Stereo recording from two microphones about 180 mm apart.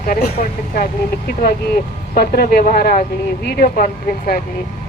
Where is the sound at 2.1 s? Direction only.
55° left (ahead or behind).